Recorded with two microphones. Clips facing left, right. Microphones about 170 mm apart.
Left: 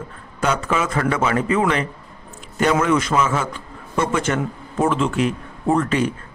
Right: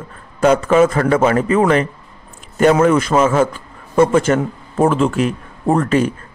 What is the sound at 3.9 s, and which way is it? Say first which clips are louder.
Speech: right 8 dB; 35° right (ahead or behind).